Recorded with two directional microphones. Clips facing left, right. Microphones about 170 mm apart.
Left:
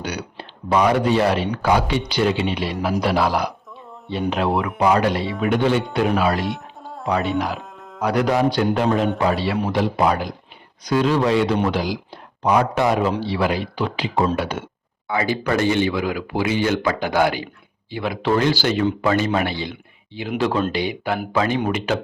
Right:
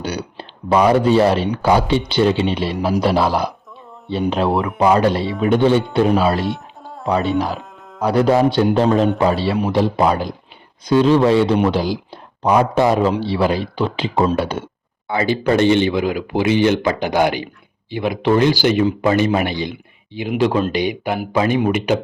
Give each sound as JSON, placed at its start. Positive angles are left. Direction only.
{"t": 0.0, "sound": "a man's voice", "side_deg": -30}
{"t": 4.8, "sound": "a man's voice", "side_deg": -30}
{"t": 6.8, "sound": "music", "side_deg": 0}
{"t": 8.0, "sound": "a man's voice", "side_deg": -30}
{"t": 19.7, "sound": "a sound", "side_deg": -15}
{"t": 20.4, "sound": "speech", "side_deg": -10}